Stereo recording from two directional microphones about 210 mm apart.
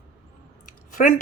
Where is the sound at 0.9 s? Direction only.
45° left (ahead or behind).